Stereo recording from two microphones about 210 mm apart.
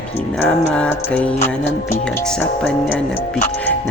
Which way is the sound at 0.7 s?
5° left (ahead or behind).